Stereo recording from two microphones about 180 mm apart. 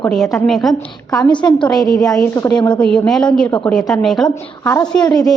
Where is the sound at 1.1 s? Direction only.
20° left (ahead or behind).